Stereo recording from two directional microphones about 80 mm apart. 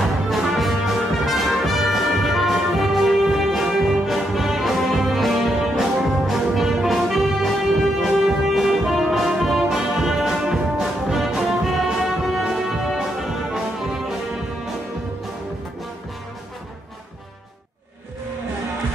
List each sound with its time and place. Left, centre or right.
0.0 s music: centre